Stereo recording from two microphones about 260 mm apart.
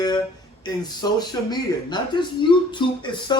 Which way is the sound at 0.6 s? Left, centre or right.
Centre.